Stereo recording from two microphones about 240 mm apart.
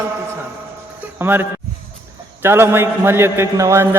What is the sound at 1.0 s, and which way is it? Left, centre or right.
Music, centre.